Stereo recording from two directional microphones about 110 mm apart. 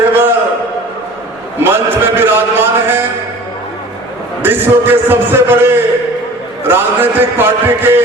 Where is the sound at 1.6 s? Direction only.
20° right (ahead or behind).